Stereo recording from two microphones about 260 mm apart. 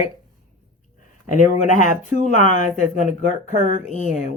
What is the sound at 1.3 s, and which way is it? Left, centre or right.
Speech, left.